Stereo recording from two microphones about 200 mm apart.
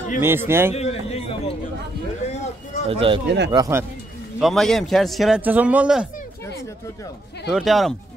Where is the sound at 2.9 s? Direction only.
25° right (ahead or behind).